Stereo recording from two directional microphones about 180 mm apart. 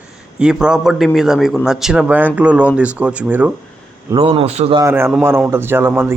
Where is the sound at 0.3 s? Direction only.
5° right (ahead or behind).